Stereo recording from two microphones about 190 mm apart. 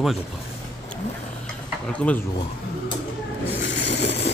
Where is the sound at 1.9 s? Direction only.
10° left (ahead or behind).